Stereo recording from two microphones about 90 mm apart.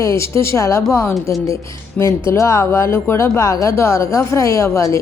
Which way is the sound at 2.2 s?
35° left (ahead or behind).